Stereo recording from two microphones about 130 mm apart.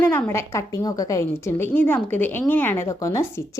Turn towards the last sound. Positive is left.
turn(degrees=20)  # may be behind; listen again after turning